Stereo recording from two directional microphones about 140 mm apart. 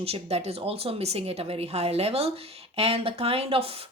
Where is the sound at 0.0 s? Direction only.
45° right (ahead or behind).